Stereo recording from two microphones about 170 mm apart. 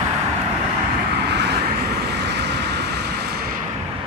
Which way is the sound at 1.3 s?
80° right.